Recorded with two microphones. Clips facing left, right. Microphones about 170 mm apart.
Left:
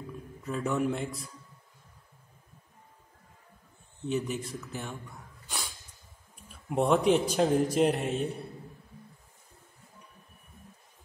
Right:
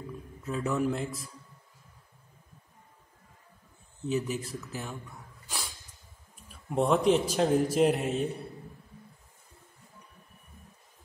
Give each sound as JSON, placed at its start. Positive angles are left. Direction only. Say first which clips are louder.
{"t": 0.4, "sound": "a man's voice", "louder": "even", "side_deg": 0}
{"t": 4.1, "sound": "a man's voice", "louder": "right 1 dB", "side_deg": -5}
{"t": 5.5, "sound": "snort", "louder": "even", "side_deg": 0}
{"t": 6.5, "sound": "a man's voice", "louder": "left 1 dB", "side_deg": 0}